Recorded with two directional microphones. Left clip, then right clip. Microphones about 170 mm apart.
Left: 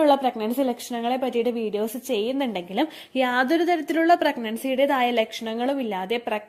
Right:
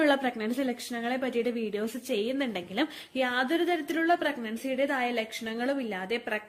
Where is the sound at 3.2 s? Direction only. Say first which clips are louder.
Left 6 dB; 35° left (ahead or behind).